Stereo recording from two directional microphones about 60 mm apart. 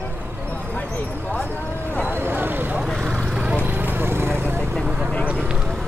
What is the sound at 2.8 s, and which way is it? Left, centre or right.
Vehicle, centre.